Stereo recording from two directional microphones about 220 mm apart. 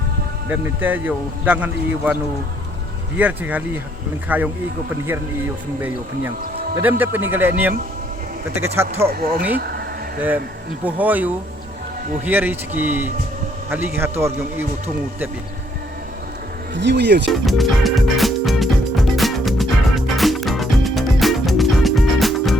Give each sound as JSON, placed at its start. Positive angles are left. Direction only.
{"t": 0.5, "sound": "speech", "side_deg": -10}
{"t": 3.2, "sound": "speech", "side_deg": -5}
{"t": 6.8, "sound": "speech", "side_deg": -10}
{"t": 9.1, "sound": "speech", "side_deg": -40}
{"t": 10.2, "sound": "speech", "side_deg": -10}
{"t": 16.7, "sound": "speech", "side_deg": -50}
{"t": 17.4, "sound": "music", "side_deg": 0}